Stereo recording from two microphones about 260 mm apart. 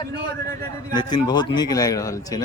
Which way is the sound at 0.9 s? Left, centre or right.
Centre.